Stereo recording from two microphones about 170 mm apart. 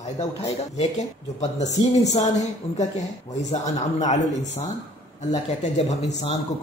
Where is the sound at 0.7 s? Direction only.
40° left (ahead or behind).